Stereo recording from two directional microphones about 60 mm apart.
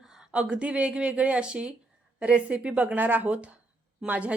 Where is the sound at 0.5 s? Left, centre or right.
Centre.